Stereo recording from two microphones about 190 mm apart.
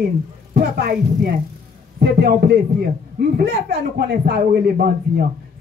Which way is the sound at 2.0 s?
55° right (ahead or behind).